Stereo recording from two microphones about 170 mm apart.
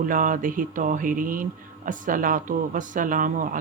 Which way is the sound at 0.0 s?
50° right (ahead or behind).